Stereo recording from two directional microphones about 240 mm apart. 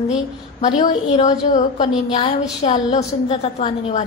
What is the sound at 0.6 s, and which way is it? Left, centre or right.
A woman's voice, left.